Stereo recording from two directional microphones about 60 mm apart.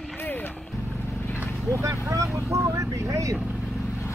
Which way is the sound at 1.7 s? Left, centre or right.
Right.